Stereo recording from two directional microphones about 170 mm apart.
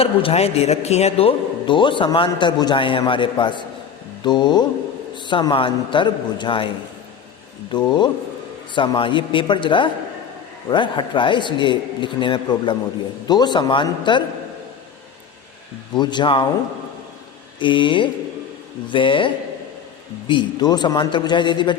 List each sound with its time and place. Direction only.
0.0 s a man's voice: 35° left (ahead or behind)
7.7 s a man's voice: 25° left (ahead or behind)
16.0 s a man's voice: 25° left (ahead or behind)
17.6 s a man's voice: 30° left (ahead or behind)